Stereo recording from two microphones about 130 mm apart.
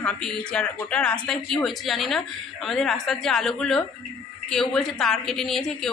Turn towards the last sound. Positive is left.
turn(degrees=5)  # may be behind; listen again after turning